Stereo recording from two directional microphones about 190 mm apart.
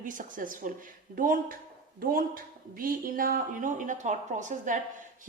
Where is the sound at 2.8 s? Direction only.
50° right (ahead or behind).